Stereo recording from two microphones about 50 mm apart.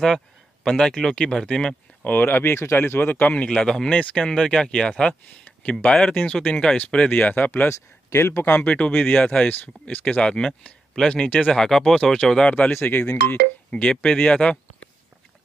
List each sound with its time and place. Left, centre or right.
0.7 s speech: centre
2.0 s speech: left
2.5 s speech: left
3.4 s speech: centre; by 7.6 s left
7.6 s speech: left
8.5 s speech: left
8.7 s speech: left
10.2 s speech: centre
11.5 s speech: centre
12.8 s speech: left
13.7 s speech: centre